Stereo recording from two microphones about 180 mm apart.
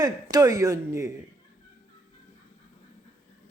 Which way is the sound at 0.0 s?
20° right (ahead or behind).